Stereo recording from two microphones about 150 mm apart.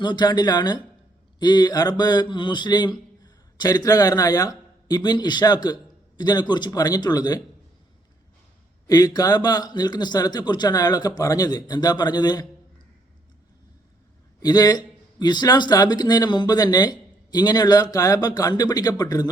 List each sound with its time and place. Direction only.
0.0 s speech: 30° left (ahead or behind)
8.9 s speech: 25° left (ahead or behind)
14.4 s speech: 25° left (ahead or behind)